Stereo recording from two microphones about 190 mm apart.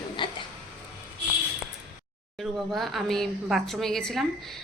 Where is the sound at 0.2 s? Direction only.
25° left (ahead or behind).